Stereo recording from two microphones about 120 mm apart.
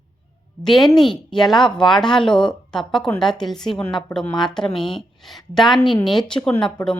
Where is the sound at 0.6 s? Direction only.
Centre (ahead or behind).